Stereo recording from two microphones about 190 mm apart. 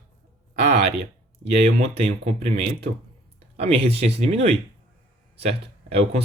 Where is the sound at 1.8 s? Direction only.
30° right (ahead or behind).